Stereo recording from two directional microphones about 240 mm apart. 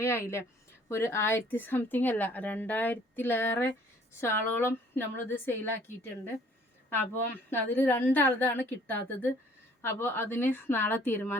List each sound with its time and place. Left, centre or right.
0.0 s a woman's voice: centre
7.5 s a woman's voice: centre